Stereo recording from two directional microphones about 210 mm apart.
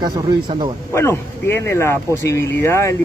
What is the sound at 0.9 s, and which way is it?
Speech, 10° left (ahead or behind).